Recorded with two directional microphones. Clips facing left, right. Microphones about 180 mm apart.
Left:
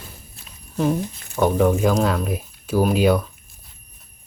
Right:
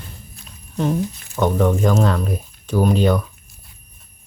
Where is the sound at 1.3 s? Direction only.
5° left (ahead or behind).